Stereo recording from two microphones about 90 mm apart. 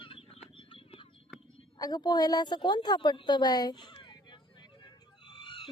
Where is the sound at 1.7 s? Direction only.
45° left (ahead or behind).